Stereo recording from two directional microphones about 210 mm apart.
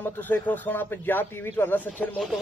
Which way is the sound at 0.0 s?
10° left (ahead or behind).